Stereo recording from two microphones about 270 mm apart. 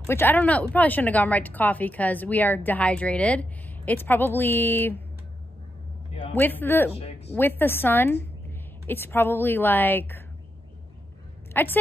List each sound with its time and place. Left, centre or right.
0.1 s a woman's voice: centre
6.3 s a woman's voice: centre
11.5 s a woman's voice: centre